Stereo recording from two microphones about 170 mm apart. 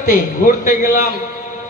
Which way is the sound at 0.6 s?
55° left (ahead or behind).